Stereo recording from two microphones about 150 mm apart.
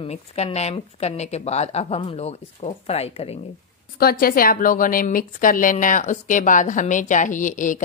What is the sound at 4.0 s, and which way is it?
A woman's voice, 85° left.